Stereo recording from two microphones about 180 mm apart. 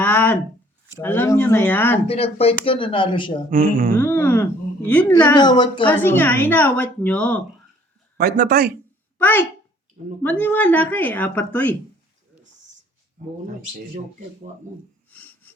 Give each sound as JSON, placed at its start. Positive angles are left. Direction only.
{"t": 0.0, "sound": "a sound", "side_deg": 10}
{"t": 0.9, "sound": "speech", "side_deg": 10}
{"t": 2.0, "sound": "speech", "side_deg": 35}
{"t": 3.5, "sound": "music", "side_deg": -50}
{"t": 3.9, "sound": "speech", "side_deg": 10}
{"t": 5.3, "sound": "speech", "side_deg": 25}
{"t": 6.0, "sound": "speech", "side_deg": 10}
{"t": 8.2, "sound": "speech", "side_deg": -60}
{"t": 9.1, "sound": "speech", "side_deg": 10}
{"t": 15.1, "sound": "a sound", "side_deg": 10}